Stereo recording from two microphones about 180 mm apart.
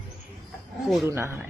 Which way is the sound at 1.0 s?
15° right (ahead or behind).